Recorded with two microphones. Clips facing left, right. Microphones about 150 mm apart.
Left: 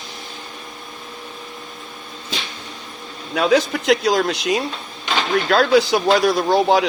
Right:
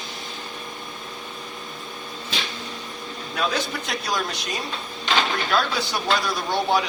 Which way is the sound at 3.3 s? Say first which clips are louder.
Left 9 dB; 90° left.